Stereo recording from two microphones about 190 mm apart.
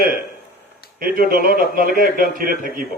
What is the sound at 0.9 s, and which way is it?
A man's voice, 50° right (ahead or behind).